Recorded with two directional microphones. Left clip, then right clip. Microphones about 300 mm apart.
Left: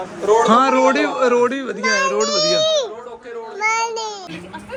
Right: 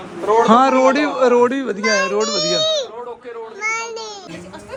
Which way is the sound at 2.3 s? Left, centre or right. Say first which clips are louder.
Left 1 dB; left.